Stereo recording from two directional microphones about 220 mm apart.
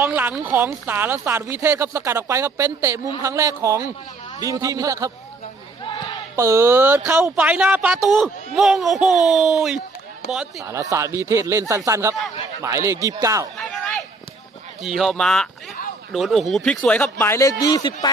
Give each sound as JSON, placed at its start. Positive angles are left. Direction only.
{"t": 0.0, "sound": "a woman's voice", "side_deg": -10}
{"t": 5.8, "sound": "a sound", "side_deg": 20}
{"t": 6.3, "sound": "a woman's voice", "side_deg": -15}
{"t": 10.7, "sound": "a woman's voice", "side_deg": -15}
{"t": 14.8, "sound": "speech", "side_deg": 0}